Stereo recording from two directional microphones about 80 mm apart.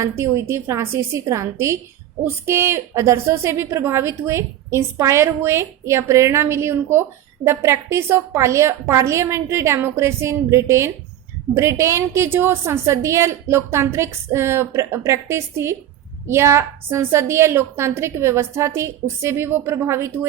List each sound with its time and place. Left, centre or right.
0.0 s a woman's voice: right